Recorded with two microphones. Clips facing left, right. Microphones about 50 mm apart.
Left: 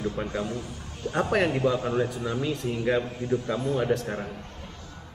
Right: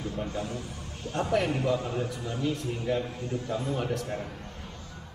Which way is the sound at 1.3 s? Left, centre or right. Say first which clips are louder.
Left 2 dB; left.